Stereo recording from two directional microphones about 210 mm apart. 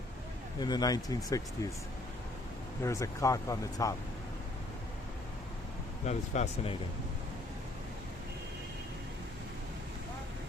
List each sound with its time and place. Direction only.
0.6 s speech: 20° left (ahead or behind)
2.8 s speech: 15° left (ahead or behind)
6.1 s speech: 30° left (ahead or behind)